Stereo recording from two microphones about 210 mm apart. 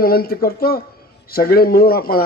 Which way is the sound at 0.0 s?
45° left (ahead or behind).